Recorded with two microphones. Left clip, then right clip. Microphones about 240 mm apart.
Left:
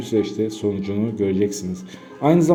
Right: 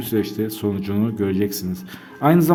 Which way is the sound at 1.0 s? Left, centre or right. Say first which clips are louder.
Left 2 dB; right.